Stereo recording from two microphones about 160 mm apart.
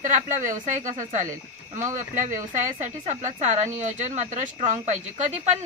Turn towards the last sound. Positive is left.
turn(degrees=-45)  # may be behind; listen again after turning